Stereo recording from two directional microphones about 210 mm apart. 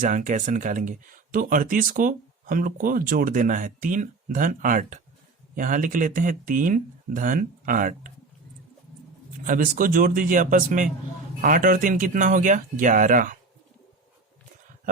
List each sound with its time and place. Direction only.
0.0 s speech: 35° right (ahead or behind)
9.4 s speech: 40° right (ahead or behind)